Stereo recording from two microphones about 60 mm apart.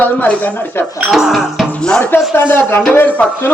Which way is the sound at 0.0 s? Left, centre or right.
Left.